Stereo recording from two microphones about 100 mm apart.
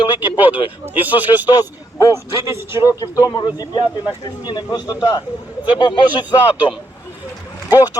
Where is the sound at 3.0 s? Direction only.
35° left (ahead or behind).